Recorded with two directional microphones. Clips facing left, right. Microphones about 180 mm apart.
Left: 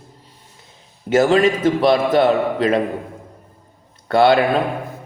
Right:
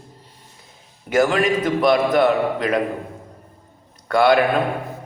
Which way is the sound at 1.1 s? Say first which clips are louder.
Left 3 dB; 25° left (ahead or behind).